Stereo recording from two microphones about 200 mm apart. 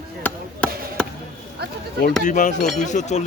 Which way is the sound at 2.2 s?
40° left (ahead or behind).